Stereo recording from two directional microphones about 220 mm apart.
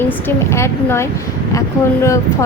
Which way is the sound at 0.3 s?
10° left (ahead or behind).